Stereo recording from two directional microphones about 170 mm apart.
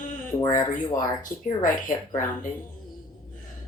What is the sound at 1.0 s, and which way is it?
Speech, 50° left (ahead or behind).